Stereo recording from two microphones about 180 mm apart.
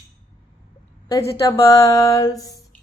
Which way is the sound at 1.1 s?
15° left (ahead or behind).